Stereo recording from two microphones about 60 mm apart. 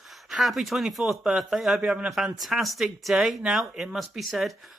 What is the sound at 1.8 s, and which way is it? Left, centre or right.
Speech, centre.